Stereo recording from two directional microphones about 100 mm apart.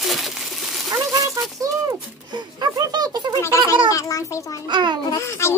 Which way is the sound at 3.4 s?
30° left (ahead or behind).